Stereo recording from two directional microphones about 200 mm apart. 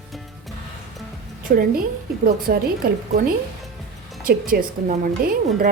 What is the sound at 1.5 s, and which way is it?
A woman's voice, 45° right (ahead or behind).